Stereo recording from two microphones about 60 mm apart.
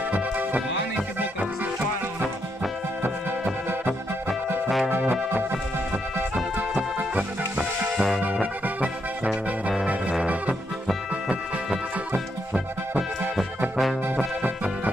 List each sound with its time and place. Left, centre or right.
7.5 s music: centre
8.2 s music: right
8.8 s music: centre